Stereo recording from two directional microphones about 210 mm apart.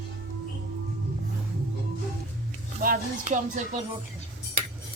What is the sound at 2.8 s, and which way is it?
Music, 40° right (ahead or behind).